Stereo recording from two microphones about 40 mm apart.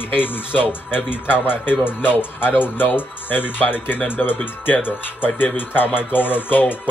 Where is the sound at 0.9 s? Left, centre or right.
Left.